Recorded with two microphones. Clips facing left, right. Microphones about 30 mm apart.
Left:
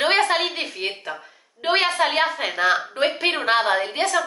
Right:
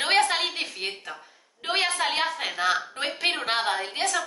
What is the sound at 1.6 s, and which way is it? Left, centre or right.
A woman's voice, left.